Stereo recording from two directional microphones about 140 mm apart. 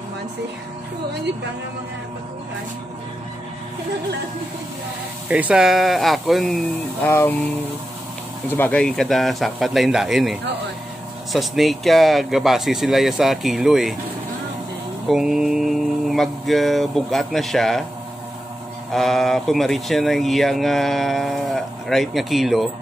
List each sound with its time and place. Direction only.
5.3 s speech: 5° right (ahead or behind)
7.0 s speech: 15° left (ahead or behind)
8.5 s speech: 15° left (ahead or behind)
11.3 s speech: centre (ahead or behind)
15.0 s speech: 5° right (ahead or behind)
18.9 s speech: centre (ahead or behind)